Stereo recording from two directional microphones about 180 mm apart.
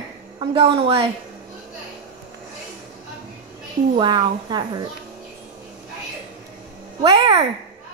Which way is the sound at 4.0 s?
25° right (ahead or behind).